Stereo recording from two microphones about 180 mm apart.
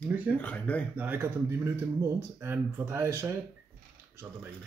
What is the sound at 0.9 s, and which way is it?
Speech, 10° right (ahead or behind).